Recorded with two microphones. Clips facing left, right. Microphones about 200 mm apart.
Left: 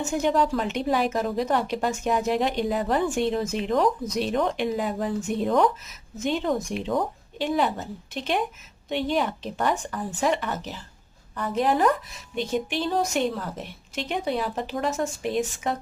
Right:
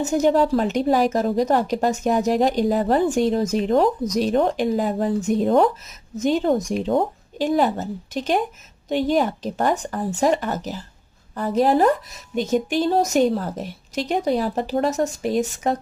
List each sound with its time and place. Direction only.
0.1 s a woman's voice: 40° right (ahead or behind)